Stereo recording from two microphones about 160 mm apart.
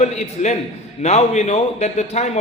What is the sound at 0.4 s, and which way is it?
A man's voice, 45° left (ahead or behind).